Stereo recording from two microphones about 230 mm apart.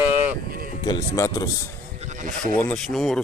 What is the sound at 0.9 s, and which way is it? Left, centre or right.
Speech, centre.